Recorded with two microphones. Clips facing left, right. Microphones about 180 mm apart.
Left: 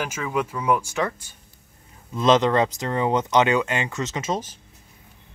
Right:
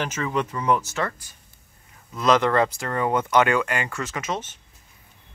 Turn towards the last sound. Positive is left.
turn(degrees=35)  # may be behind; listen again after turning